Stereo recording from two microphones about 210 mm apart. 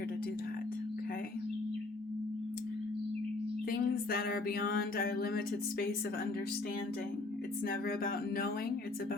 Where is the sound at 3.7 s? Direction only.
45° left (ahead or behind).